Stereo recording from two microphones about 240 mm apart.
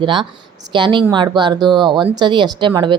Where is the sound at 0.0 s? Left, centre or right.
Centre.